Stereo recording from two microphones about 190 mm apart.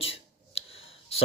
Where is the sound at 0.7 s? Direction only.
30° left (ahead or behind).